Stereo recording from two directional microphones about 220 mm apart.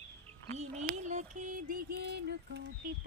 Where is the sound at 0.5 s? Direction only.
30° right (ahead or behind).